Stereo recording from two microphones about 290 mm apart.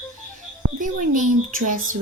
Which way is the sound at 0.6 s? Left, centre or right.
Right.